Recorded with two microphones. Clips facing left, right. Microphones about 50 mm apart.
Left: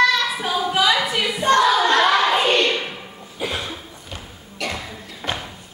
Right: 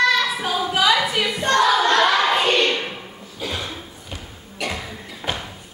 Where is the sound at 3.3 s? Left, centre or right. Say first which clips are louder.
Left 2 dB; centre.